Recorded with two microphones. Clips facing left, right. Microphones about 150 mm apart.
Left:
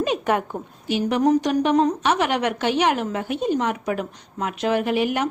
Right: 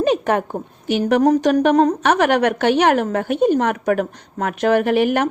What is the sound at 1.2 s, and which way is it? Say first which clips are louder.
A woman's voice: right 3 dB; 50° right (ahead or behind).